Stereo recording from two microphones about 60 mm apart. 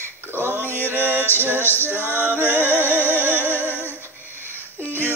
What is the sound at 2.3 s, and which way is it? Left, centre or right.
Music, left.